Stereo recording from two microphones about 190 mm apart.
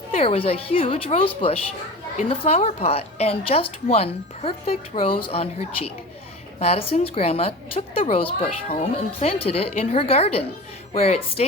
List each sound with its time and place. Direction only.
0.1 s a woman's voice: 30° left (ahead or behind)
6.6 s a woman's voice: 30° left (ahead or behind)